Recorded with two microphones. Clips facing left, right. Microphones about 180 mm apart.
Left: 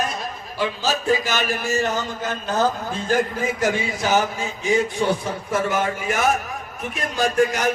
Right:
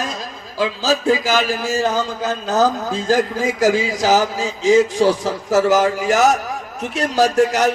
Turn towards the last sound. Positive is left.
turn(degrees=-75)  # may be behind; listen again after turning